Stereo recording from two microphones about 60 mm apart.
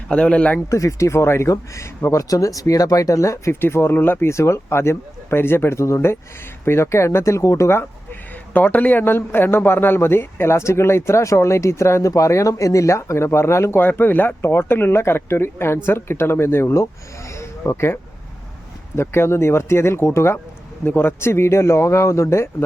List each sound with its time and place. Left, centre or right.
0.1 s speech: centre
0.7 s speech: left
3.5 s speech: left
8.5 s speech: left